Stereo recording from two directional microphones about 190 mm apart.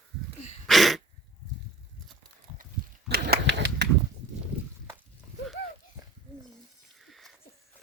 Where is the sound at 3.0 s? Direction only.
60° right (ahead or behind).